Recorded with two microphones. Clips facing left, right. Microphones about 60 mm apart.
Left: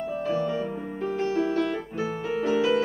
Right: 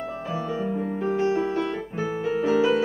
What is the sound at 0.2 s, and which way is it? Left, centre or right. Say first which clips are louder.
Music: left 2 dB; centre.